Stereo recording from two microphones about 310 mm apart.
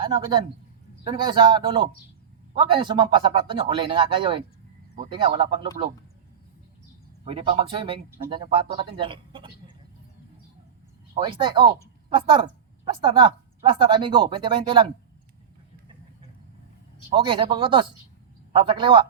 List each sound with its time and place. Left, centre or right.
0.0 s a man's voice: centre
7.3 s a woman's voice: centre
11.2 s a woman's voice: centre
17.1 s a woman's voice: centre